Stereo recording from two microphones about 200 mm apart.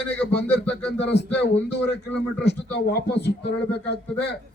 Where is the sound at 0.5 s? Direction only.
10° left (ahead or behind).